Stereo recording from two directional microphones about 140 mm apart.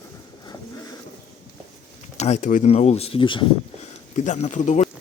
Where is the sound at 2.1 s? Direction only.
50° left (ahead or behind).